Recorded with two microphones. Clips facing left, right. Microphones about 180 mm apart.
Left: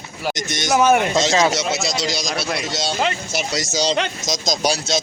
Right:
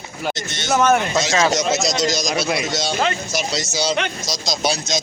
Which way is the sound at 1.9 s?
45° right (ahead or behind).